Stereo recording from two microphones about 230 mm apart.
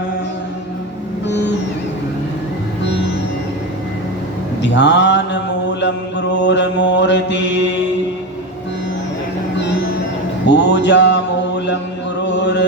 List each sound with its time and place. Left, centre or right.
4.6 s mantra: left
10.4 s music: left